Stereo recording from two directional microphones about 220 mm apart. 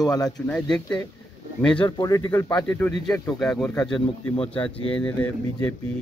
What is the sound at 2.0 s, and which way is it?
Speech, 15° left (ahead or behind).